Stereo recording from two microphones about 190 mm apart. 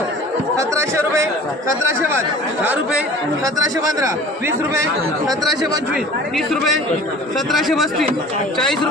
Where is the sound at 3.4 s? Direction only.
15° right (ahead or behind).